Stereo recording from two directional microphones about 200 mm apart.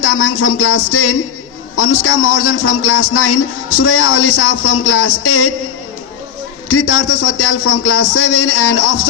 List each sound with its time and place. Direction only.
0.1 s a man's voice: 90° left
6.7 s a man's voice: 90° left